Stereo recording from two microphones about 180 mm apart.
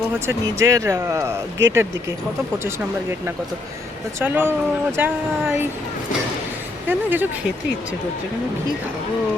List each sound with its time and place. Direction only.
0.3 s speech: 15° right (ahead or behind)
6.8 s speech: 10° right (ahead or behind)